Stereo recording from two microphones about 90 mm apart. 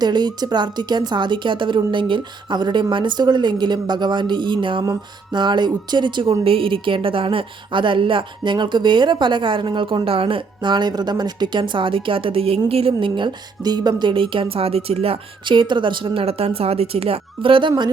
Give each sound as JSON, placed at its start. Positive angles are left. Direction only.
{"t": 0.0, "sound": "speech", "side_deg": -55}
{"t": 4.8, "sound": "speech", "side_deg": -50}
{"t": 6.4, "sound": "speech", "side_deg": -85}